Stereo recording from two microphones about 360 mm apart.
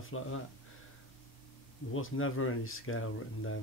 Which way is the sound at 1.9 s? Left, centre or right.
Left.